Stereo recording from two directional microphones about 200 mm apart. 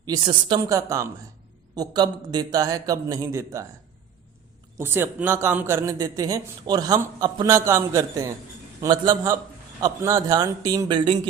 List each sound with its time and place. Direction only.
0.0 s a man's voice: 20° right (ahead or behind)
4.8 s a man's voice: 10° right (ahead or behind)